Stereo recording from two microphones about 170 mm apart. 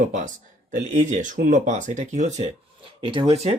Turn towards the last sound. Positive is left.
turn(degrees=-40)  # may be behind; listen again after turning